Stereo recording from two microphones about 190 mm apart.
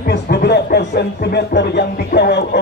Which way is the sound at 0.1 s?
60° left (ahead or behind).